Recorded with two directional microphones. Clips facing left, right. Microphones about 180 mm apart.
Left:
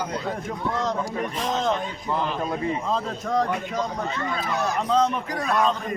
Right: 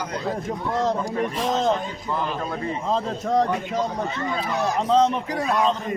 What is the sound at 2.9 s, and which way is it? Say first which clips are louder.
Speech: right 3 dB; 30° right (ahead or behind).